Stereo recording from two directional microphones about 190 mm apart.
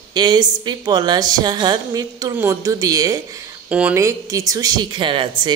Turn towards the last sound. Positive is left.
turn(degrees=-25)  # may be behind; listen again after turning